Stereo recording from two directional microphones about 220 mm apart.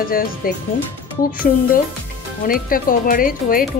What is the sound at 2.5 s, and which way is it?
A woman's voice, 40° left (ahead or behind).